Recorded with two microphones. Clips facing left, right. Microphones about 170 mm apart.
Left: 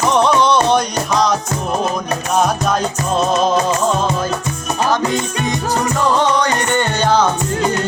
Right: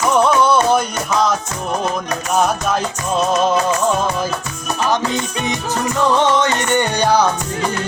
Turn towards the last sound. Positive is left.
turn(degrees=-15)  # may be behind; listen again after turning